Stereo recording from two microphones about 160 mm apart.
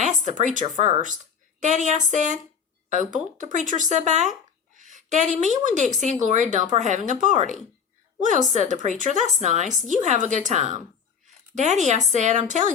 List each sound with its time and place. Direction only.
0.2 s a woman's voice: 50° right (ahead or behind)
4.8 s a sound: 50° right (ahead or behind)
5.6 s speech: 50° right (ahead or behind)